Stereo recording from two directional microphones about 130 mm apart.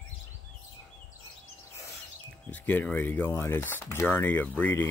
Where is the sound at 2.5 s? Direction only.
10° left (ahead or behind).